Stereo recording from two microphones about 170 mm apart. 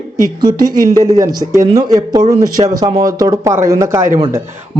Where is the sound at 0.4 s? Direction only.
25° right (ahead or behind).